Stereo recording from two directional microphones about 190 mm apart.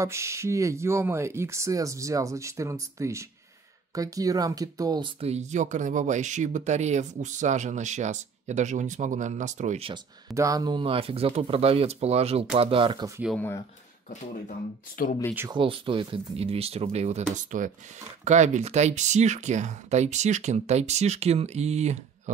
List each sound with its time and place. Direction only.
0.0 s speech: 15° right (ahead or behind); by 9.9 s 35° right (ahead or behind)
10.3 s speech: 20° right (ahead or behind)
15.5 s speech: 25° right (ahead or behind)